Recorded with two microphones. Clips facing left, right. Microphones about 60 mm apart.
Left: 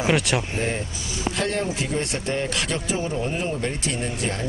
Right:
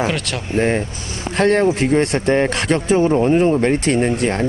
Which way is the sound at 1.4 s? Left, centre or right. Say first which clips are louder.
Right 13 dB; right.